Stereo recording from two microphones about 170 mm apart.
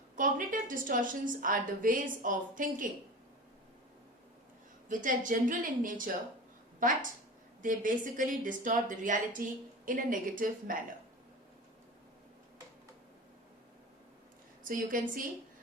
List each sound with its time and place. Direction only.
0.2 s a woman's voice: 50° right (ahead or behind)
4.9 s a woman's voice: 50° right (ahead or behind)
14.6 s a woman's voice: 55° right (ahead or behind)